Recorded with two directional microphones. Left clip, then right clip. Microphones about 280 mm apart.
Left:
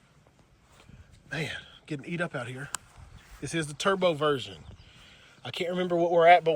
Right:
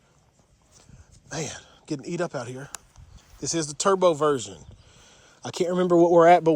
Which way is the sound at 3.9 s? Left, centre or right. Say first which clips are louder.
Right 5 dB; centre.